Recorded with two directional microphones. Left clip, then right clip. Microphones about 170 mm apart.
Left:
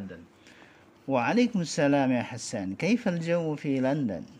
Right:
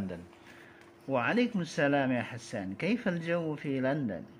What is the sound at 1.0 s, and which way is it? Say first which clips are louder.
A man's voice: left 4 dB; 35° left (ahead or behind).